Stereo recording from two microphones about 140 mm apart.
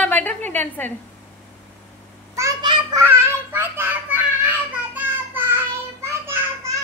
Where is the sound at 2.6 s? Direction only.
30° right (ahead or behind).